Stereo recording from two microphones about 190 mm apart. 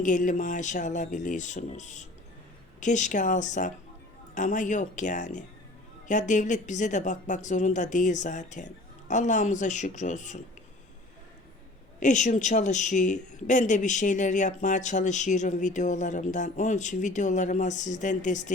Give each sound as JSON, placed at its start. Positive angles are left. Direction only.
{"t": 0.0, "sound": "a woman's voice", "side_deg": 40}
{"t": 11.9, "sound": "a woman's voice", "side_deg": 40}